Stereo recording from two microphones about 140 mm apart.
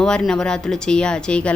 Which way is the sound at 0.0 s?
5° left (ahead or behind).